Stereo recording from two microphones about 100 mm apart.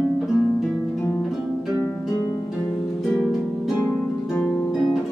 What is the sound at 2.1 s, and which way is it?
Harp, 35° left (ahead or behind).